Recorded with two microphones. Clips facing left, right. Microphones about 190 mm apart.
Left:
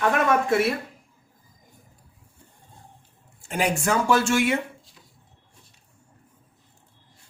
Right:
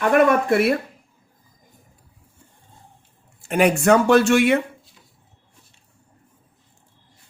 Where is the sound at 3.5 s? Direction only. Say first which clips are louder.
Right 8 dB; 65° right (ahead or behind).